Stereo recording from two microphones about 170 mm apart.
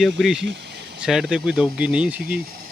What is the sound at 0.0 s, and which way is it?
Speech, centre (ahead or behind).